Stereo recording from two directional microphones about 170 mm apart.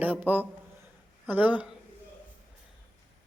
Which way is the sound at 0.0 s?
10° right (ahead or behind).